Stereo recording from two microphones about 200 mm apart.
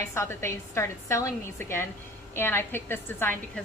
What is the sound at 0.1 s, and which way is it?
A woman's voice, 15° left (ahead or behind).